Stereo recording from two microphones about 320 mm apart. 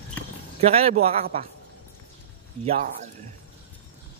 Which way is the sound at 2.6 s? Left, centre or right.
Right.